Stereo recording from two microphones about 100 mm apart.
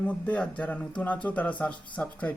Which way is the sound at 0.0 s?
10° left (ahead or behind).